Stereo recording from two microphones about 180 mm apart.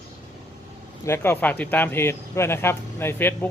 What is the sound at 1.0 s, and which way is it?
Speech, 15° left (ahead or behind).